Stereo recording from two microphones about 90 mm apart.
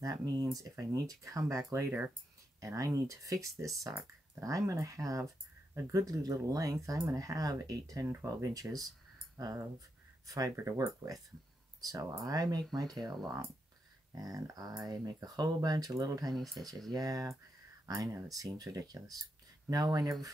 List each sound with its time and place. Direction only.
0.0 s speech: 45° right (ahead or behind)
10.5 s speech: 30° right (ahead or behind)
11.8 s speech: 40° right (ahead or behind)
16.3 s speech: centre (ahead or behind)
16.9 s speech: 40° right (ahead or behind)